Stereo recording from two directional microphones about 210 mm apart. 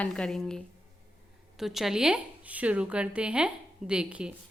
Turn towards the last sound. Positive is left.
turn(degrees=-5)  # may be behind; listen again after turning